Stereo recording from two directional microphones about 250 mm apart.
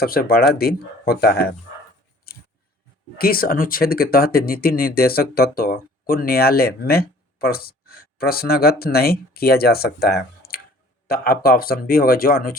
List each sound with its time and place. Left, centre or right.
0.0 s speech: left
3.2 s speech: left